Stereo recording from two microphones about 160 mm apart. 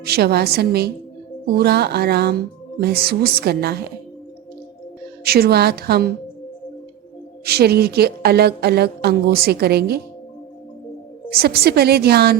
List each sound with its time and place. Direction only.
0.0 s speech: 80° right
5.2 s speech: 75° right (ahead or behind)
7.4 s speech: 80° right
11.3 s a woman's voice: 75° right (ahead or behind)